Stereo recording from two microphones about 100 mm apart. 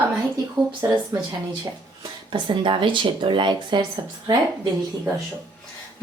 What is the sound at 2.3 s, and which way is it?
Speech, 55° right (ahead or behind).